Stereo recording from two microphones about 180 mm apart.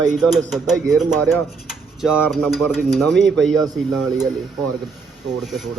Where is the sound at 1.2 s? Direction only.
10° left (ahead or behind).